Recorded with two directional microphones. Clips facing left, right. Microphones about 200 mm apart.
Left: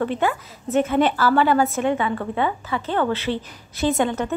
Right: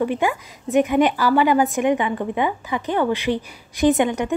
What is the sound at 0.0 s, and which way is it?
A woman's voice, 10° right (ahead or behind).